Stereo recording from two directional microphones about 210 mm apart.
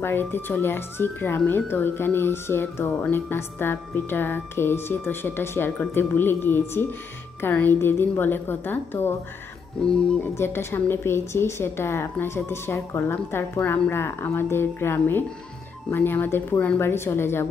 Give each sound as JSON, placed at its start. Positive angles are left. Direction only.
{"t": 0.0, "sound": "speech", "side_deg": 10}